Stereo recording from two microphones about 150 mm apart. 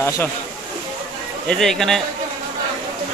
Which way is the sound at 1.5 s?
5° left (ahead or behind).